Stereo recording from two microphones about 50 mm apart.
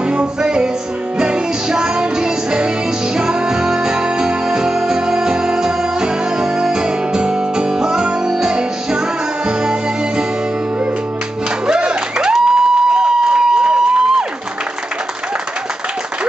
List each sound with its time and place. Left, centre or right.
0.0 s music: right
11.6 s music: centre
12.3 s a sound: centre